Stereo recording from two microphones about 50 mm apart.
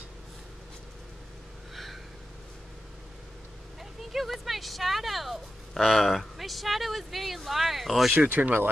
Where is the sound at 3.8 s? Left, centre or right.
Centre.